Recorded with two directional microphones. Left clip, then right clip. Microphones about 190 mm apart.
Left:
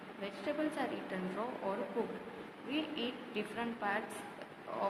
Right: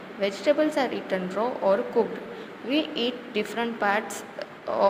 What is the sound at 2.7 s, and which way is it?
A woman's voice, 30° right (ahead or behind).